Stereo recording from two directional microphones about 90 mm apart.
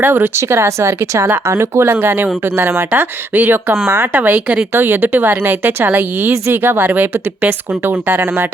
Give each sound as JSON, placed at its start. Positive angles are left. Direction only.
{"t": 0.0, "sound": "speech", "side_deg": -25}
{"t": 4.7, "sound": "speech", "side_deg": -25}